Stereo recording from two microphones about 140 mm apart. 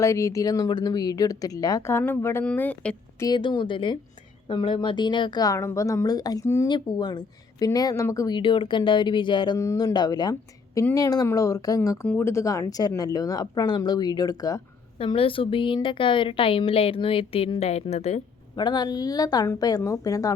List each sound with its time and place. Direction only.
0.0 s speech: 20° left (ahead or behind)
3.2 s a woman's voice: 30° left (ahead or behind)
6.7 s speech: 35° left (ahead or behind)
8.4 s a woman's voice: 35° left (ahead or behind)
9.6 s speech: 25° left (ahead or behind)
14.9 s a woman's voice: 40° left (ahead or behind)
18.5 s speech: 30° left (ahead or behind)